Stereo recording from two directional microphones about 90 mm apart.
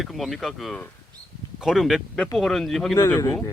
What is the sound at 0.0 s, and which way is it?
Speech, centre (ahead or behind).